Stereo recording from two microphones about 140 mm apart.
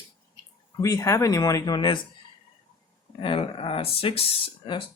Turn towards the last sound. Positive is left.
turn(degrees=40)  # may be behind; listen again after turning